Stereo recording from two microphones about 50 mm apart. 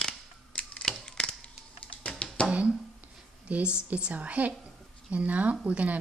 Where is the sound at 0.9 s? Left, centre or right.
Centre.